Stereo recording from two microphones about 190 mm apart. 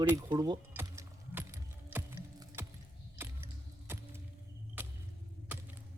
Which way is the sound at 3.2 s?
10° right (ahead or behind).